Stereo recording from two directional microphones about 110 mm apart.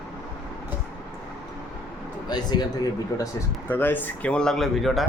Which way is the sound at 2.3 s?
40° left (ahead or behind).